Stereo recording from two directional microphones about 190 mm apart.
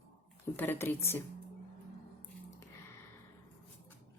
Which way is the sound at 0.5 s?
10° left (ahead or behind).